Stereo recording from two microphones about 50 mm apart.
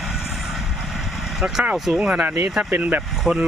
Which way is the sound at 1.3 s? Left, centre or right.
Centre.